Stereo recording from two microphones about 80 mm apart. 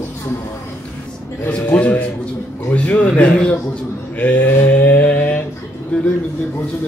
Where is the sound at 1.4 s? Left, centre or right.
Centre.